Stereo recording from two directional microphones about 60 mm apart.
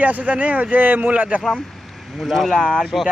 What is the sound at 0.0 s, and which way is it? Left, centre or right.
Speech, right.